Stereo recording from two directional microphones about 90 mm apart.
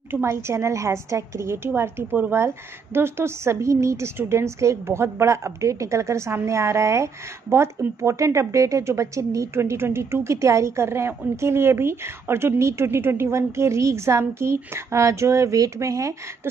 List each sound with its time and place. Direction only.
0.1 s a woman's voice: 30° right (ahead or behind)